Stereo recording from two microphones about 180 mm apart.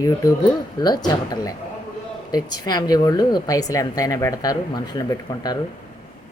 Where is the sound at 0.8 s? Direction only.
20° left (ahead or behind).